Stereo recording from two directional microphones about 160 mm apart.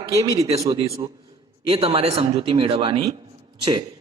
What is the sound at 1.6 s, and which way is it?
A man's voice, 35° right (ahead or behind).